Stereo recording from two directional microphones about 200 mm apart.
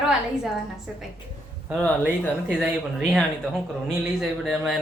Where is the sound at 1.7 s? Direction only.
Centre (ahead or behind).